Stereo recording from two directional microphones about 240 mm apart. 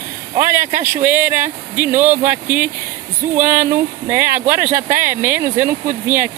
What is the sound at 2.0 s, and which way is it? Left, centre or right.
Speech, right.